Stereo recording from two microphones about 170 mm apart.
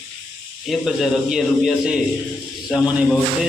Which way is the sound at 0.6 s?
Centre (ahead or behind).